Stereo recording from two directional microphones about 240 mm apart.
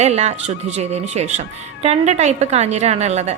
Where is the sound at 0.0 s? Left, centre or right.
Right.